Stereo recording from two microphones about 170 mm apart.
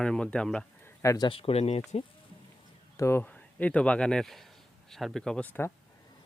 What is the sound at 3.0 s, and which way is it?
Speech, 15° left (ahead or behind).